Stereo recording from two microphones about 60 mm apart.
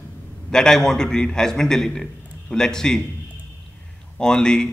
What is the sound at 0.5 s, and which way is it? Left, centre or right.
Speech, centre.